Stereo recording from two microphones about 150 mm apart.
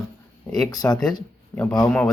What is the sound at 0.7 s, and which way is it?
Speech, 25° left (ahead or behind).